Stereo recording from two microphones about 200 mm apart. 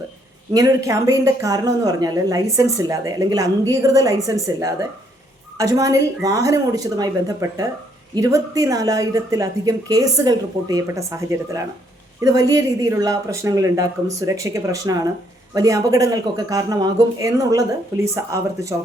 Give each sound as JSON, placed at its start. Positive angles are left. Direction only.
{"t": 0.5, "sound": "speech", "side_deg": -15}